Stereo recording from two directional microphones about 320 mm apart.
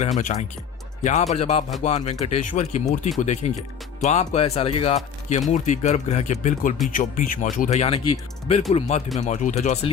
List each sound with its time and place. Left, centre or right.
0.2 s speech: left